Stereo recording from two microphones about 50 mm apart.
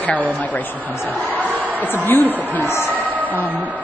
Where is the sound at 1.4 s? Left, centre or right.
Right.